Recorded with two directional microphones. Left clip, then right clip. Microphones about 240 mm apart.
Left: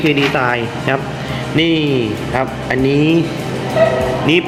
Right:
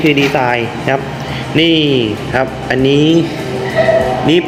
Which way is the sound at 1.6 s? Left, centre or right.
Left.